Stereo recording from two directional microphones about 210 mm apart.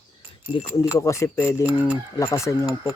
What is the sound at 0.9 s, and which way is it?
Speech, 15° left (ahead or behind).